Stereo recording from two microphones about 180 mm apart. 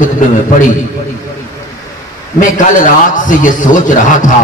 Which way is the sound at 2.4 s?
45° left (ahead or behind).